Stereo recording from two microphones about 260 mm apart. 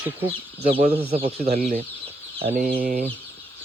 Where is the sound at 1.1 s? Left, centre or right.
Right.